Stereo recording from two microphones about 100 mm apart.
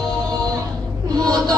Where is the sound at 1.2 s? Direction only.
35° right (ahead or behind).